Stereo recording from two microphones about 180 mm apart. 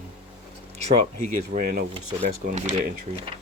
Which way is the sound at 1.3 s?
55° right (ahead or behind).